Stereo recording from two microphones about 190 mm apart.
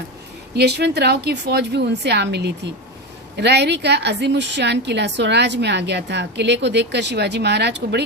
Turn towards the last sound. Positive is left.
turn(degrees=-60)  # may be behind; listen again after turning